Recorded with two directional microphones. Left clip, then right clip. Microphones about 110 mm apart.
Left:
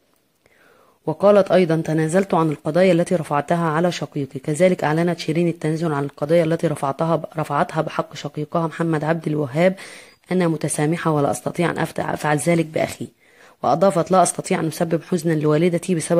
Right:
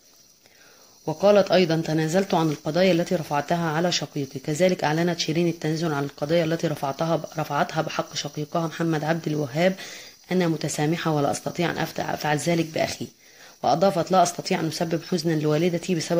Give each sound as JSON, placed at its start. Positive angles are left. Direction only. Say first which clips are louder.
{"t": 1.0, "sound": "speech", "louder": "left 4 dB", "side_deg": 35}